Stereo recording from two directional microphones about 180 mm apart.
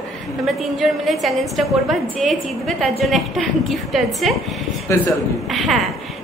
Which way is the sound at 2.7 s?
Centre (ahead or behind).